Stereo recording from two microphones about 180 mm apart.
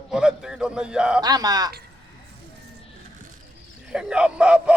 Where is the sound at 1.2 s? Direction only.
20° right (ahead or behind).